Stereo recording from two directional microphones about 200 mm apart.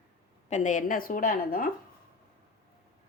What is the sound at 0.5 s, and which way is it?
A woman's voice, 40° left (ahead or behind).